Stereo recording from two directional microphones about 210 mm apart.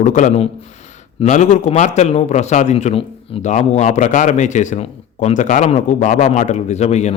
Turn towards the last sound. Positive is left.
turn(degrees=30)  # may be behind; listen again after turning